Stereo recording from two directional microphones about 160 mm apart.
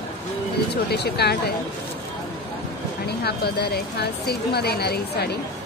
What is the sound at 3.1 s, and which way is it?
A woman's voice, 90° left.